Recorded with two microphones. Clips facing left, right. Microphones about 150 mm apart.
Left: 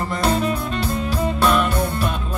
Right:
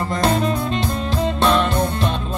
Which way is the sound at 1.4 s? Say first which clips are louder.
Right 1 dB; 25° right (ahead or behind).